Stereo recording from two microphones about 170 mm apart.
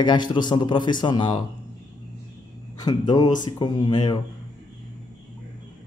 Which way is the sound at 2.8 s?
25° left (ahead or behind).